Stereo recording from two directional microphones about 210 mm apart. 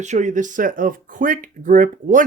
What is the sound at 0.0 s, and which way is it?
Speech, 35° right (ahead or behind).